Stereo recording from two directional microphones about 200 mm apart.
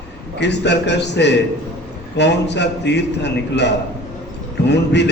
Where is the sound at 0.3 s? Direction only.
60° left (ahead or behind).